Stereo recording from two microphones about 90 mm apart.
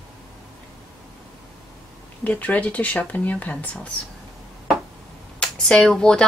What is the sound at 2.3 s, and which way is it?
Speech, 15° left (ahead or behind).